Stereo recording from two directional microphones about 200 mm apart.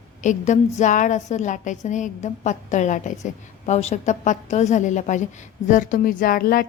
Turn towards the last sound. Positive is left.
turn(degrees=45)  # may be behind; listen again after turning